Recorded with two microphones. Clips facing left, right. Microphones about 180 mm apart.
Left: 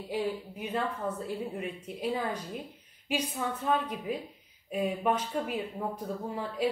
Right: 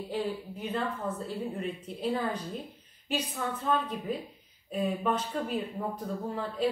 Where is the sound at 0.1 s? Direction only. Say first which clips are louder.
Left 2 dB; 10° left (ahead or behind).